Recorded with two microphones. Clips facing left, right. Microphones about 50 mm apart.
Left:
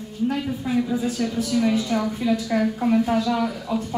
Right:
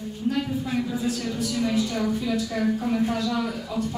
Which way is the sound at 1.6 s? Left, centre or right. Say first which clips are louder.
Even; left.